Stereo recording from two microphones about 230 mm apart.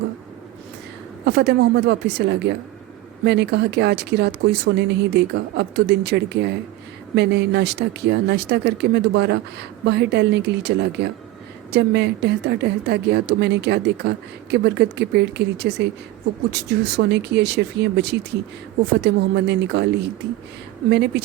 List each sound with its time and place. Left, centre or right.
1.2 s speech: right